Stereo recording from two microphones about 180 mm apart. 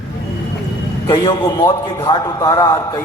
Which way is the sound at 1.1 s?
25° left (ahead or behind).